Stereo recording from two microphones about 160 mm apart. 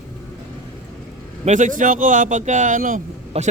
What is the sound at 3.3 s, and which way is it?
Speech, 40° right (ahead or behind).